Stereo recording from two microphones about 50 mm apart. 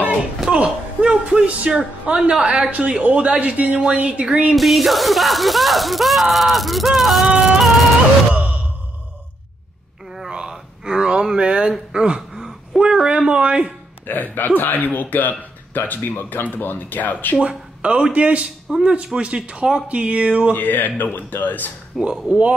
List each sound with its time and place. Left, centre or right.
0.6 s speech: right
4.6 s speech: centre
8.3 s sigh: right
10.3 s a sound: centre
12.8 s speech: centre
14.0 s speech: left
17.4 s speech: centre
20.5 s speech: left
22.0 s speech: centre